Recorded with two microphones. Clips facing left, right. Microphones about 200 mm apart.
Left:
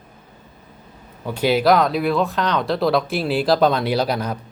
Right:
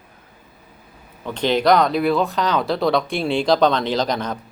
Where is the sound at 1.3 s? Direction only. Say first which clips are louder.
Even; 10° left (ahead or behind).